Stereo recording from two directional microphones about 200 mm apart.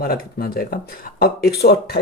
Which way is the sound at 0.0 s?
50° left (ahead or behind).